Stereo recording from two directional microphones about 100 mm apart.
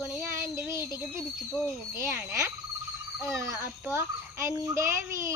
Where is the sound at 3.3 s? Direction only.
30° right (ahead or behind).